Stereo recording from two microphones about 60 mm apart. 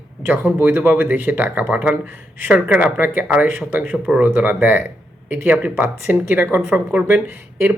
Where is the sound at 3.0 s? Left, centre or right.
Right.